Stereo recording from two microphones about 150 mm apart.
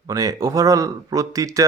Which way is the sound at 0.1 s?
25° right (ahead or behind).